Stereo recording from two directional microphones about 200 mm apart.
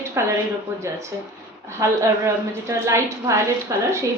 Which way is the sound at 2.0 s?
15° right (ahead or behind).